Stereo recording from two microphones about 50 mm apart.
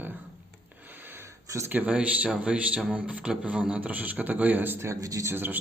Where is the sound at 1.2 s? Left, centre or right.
Right.